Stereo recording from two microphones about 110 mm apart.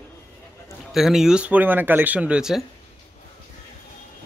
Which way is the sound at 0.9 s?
5° right (ahead or behind).